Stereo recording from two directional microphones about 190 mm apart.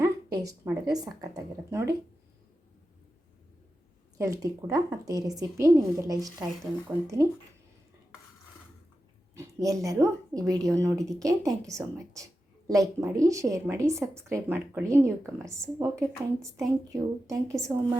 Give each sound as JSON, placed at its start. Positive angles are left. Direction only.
{"t": 0.0, "sound": "speech", "side_deg": -20}
{"t": 4.2, "sound": "a woman's voice", "side_deg": -15}
{"t": 9.3, "sound": "a woman's voice", "side_deg": -15}